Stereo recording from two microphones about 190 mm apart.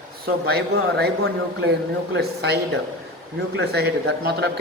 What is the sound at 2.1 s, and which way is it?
Speech, 60° right (ahead or behind).